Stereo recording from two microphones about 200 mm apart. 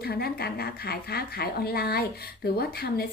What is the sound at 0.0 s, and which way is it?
Speech, 50° left (ahead or behind).